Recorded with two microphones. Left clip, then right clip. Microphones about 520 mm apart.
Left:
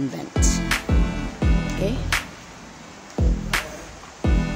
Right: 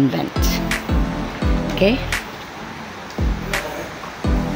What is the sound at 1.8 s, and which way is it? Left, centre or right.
Speech, left.